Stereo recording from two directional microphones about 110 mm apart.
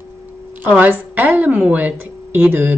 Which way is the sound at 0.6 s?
15° right (ahead or behind).